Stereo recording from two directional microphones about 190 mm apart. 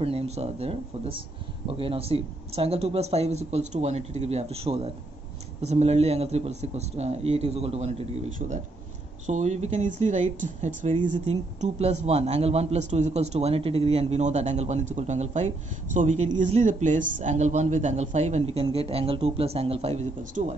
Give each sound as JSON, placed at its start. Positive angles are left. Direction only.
{"t": 0.0, "sound": "a man's voice", "side_deg": -35}